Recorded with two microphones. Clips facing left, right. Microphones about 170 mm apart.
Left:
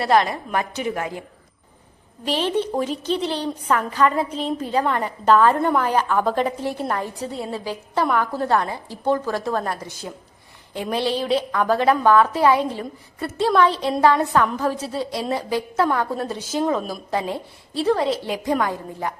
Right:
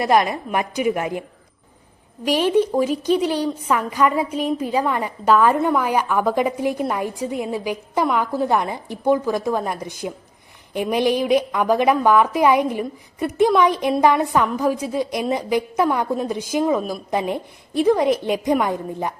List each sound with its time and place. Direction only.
0.0 s a woman's voice: 15° right (ahead or behind)
2.2 s a woman's voice: 10° right (ahead or behind)